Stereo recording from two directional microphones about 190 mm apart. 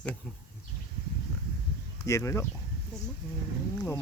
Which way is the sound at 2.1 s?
15° left (ahead or behind).